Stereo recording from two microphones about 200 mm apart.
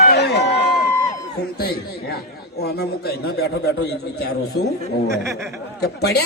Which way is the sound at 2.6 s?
55° left (ahead or behind).